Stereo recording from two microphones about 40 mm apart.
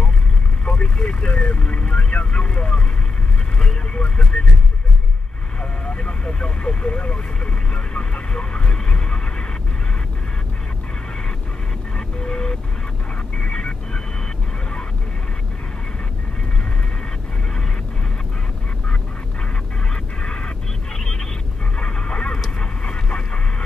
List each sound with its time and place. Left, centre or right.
0.7 s vehicle: left
5.6 s speech: left
7.7 s a sound: left
12.2 s vehicle: left
19.9 s a sound: left
22.6 s vehicle: left